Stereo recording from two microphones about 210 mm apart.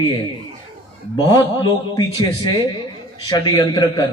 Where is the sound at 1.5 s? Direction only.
20° left (ahead or behind).